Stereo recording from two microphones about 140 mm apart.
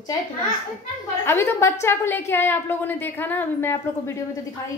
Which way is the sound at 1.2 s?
20° left (ahead or behind).